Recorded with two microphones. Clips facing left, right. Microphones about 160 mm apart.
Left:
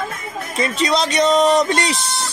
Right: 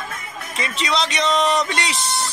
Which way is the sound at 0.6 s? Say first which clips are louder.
Left 5 dB; 45° left (ahead or behind).